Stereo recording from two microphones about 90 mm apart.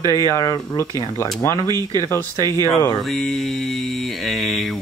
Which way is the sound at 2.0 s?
30° left (ahead or behind).